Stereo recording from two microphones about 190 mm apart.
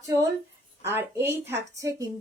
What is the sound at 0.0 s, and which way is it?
Speech, 15° right (ahead or behind).